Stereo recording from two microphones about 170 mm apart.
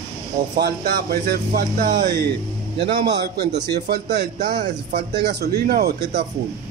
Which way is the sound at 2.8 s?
75° right (ahead or behind).